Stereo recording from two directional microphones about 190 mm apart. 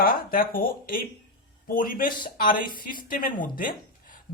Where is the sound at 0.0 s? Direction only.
50° left (ahead or behind).